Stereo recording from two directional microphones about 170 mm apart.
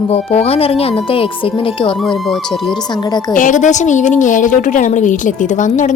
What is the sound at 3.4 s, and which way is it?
A woman's voice, 50° left (ahead or behind).